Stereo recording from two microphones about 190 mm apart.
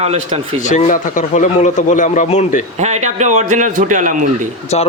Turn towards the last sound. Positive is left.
turn(degrees=35)  # may be behind; listen again after turning